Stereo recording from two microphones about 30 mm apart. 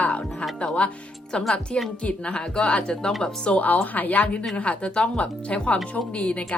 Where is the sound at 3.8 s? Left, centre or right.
Left.